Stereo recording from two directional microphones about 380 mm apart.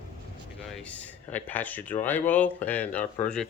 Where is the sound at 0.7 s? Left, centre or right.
Centre.